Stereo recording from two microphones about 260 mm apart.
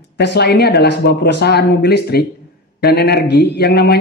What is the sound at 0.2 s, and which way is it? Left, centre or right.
A woman's voice, left.